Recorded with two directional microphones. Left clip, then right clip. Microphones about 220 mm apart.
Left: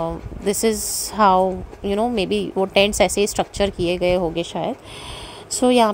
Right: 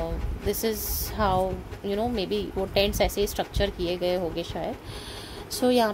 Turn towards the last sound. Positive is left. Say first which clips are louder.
# left 7 dB
turn(degrees=30)  # may be behind; listen again after turning